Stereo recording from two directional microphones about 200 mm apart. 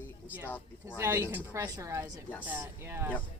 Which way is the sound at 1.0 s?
15° right (ahead or behind).